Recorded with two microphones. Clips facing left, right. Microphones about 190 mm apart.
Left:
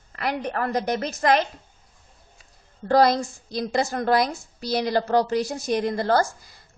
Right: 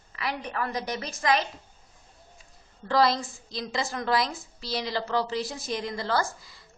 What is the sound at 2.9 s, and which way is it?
A woman's voice, 45° left (ahead or behind).